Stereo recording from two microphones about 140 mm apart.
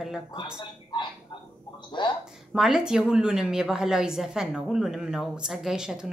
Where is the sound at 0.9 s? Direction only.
35° left (ahead or behind).